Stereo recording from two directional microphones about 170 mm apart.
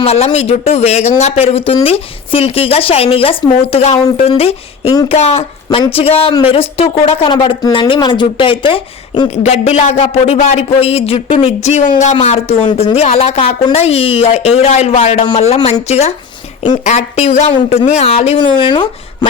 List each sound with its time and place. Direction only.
0.0 s speech: 40° left (ahead or behind)
9.3 s speech: 40° left (ahead or behind)
18.5 s speech: 25° left (ahead or behind)